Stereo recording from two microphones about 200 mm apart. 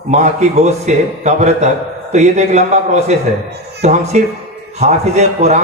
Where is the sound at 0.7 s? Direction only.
35° right (ahead or behind).